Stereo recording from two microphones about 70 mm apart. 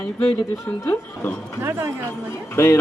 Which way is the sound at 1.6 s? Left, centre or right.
Right.